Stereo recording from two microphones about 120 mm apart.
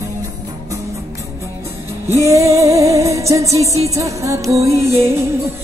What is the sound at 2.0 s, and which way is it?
Music, 25° right (ahead or behind).